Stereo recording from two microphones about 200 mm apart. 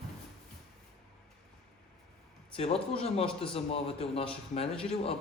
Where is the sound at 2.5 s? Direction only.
30° left (ahead or behind).